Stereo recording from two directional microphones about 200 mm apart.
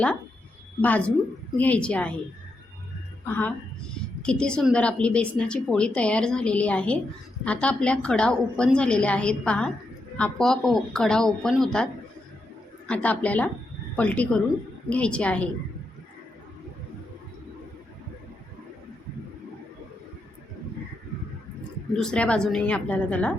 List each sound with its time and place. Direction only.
0.8 s a woman's voice: 10° left (ahead or behind)
3.2 s a woman's voice: 10° left (ahead or behind)
12.9 s a woman's voice: 5° left (ahead or behind)
21.9 s a woman's voice: 5° left (ahead or behind)